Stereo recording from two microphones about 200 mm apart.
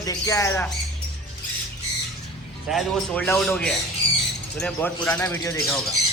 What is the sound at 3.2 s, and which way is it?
A man's voice, 10° left (ahead or behind).